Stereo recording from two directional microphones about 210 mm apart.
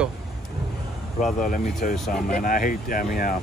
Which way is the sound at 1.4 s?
40° left (ahead or behind).